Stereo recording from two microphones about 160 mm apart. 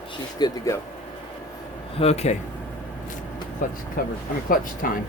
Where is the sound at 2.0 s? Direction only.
40° left (ahead or behind).